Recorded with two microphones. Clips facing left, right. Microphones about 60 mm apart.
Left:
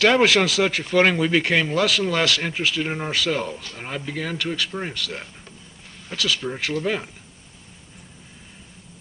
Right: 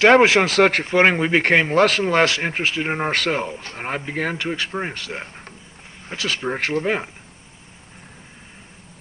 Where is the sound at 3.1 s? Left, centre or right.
Right.